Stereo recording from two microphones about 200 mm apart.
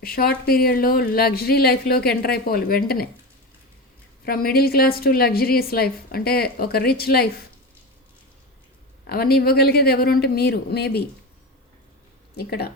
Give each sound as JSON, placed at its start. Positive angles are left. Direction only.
{"t": 0.0, "sound": "a woman's voice", "side_deg": 50}
{"t": 4.3, "sound": "a woman's voice", "side_deg": 50}
{"t": 9.0, "sound": "a woman's voice", "side_deg": 50}
{"t": 12.4, "sound": "a woman's voice", "side_deg": 50}